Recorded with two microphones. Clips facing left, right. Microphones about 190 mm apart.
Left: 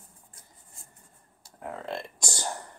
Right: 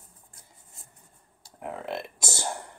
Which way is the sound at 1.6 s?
15° right (ahead or behind).